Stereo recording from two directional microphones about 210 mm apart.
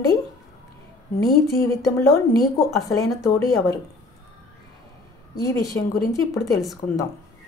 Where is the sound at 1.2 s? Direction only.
15° left (ahead or behind).